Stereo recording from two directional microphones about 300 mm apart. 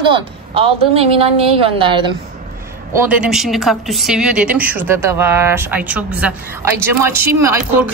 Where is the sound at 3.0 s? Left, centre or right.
Centre.